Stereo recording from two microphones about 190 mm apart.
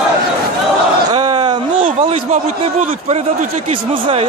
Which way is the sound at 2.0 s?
35° right (ahead or behind).